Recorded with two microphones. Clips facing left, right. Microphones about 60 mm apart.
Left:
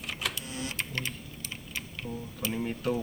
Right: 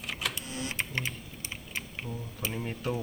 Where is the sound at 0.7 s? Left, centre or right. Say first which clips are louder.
Right 3 dB; centre.